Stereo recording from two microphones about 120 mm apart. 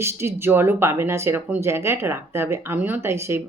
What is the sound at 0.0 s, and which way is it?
Speech, 20° right (ahead or behind).